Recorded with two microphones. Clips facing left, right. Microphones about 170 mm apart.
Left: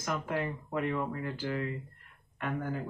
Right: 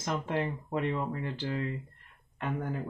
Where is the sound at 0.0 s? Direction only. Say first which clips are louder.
Right 2 dB; 25° right (ahead or behind).